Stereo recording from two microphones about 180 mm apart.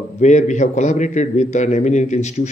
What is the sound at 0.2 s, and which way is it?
A man's voice, 40° left (ahead or behind).